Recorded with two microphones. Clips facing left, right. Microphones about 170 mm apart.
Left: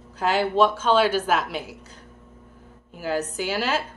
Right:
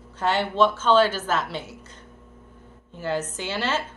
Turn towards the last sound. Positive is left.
turn(degrees=10)  # may be behind; listen again after turning